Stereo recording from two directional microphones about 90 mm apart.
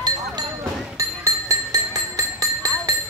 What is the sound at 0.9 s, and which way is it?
Music, 35° right (ahead or behind).